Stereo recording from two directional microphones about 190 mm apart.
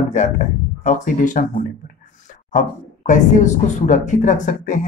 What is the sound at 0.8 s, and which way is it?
Speech, 40° left (ahead or behind).